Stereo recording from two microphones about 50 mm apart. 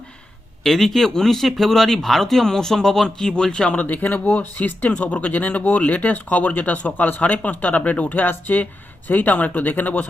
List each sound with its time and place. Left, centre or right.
0.6 s speech: centre; by 10.1 s left